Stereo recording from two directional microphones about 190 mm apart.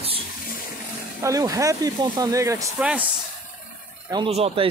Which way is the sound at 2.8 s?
5° right (ahead or behind).